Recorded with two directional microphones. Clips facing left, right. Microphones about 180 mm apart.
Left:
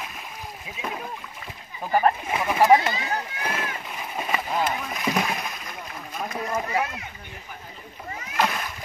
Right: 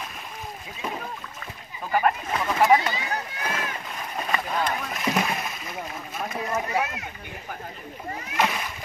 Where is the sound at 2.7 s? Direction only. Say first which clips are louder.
Left 2 dB; 20° left (ahead or behind).